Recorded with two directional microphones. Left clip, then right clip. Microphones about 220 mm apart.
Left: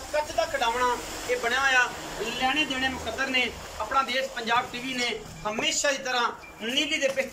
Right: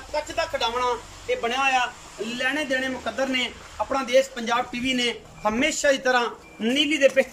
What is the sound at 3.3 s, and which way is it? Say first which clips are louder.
Speech: even; 25° right (ahead or behind).